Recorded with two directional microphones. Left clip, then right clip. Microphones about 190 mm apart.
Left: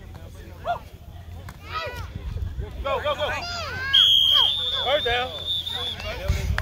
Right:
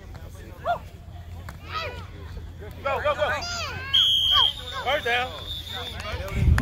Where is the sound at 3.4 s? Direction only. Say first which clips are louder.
Even; 55° right (ahead or behind).